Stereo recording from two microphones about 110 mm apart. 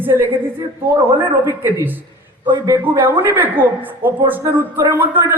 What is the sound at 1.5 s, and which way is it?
A man's voice, 25° right (ahead or behind).